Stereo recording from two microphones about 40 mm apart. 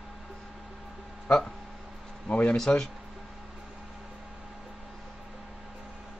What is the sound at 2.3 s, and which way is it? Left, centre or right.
Speech, left.